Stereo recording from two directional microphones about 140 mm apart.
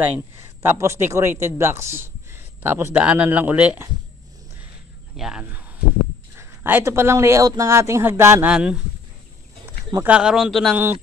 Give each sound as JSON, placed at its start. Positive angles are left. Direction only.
{"t": 0.0, "sound": "speech", "side_deg": -15}
{"t": 5.1, "sound": "speech", "side_deg": -5}
{"t": 8.5, "sound": "speech", "side_deg": -5}
{"t": 10.0, "sound": "speech", "side_deg": -5}